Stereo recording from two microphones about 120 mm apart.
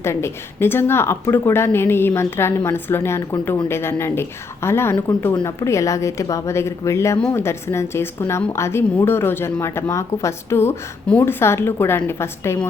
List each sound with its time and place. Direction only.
0.0 s a woman's voice: 20° left (ahead or behind)